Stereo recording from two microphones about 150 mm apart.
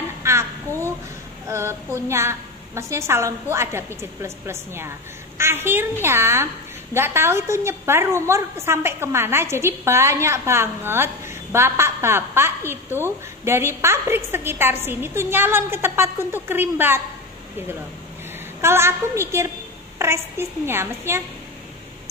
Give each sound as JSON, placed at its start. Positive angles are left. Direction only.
{"t": 0.2, "sound": "a sound", "side_deg": -20}
{"t": 1.5, "sound": "a woman's voice", "side_deg": -15}
{"t": 18.6, "sound": "a woman's voice", "side_deg": -15}